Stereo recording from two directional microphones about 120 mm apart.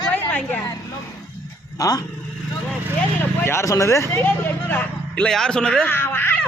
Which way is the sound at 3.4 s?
25° left (ahead or behind).